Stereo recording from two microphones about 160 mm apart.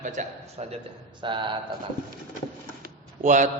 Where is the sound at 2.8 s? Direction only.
50° right (ahead or behind).